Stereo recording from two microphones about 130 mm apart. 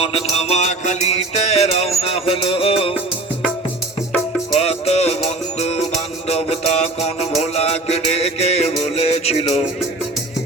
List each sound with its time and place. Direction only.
0.0 s music: 50° left (ahead or behind)
4.5 s music: 55° left (ahead or behind)